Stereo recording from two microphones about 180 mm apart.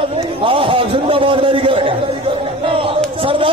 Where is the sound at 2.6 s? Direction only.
30° right (ahead or behind).